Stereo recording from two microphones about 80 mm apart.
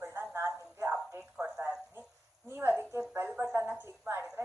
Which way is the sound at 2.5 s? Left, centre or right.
Right.